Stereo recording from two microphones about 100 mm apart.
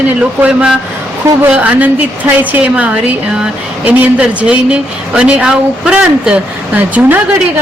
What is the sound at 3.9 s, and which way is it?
Speech, 15° right (ahead or behind).